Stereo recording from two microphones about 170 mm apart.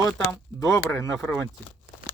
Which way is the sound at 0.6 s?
20° left (ahead or behind).